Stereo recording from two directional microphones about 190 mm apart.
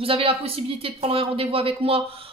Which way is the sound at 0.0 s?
30° right (ahead or behind).